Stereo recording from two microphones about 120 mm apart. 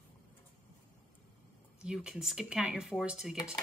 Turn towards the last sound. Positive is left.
turn(degrees=-5)  # may be behind; listen again after turning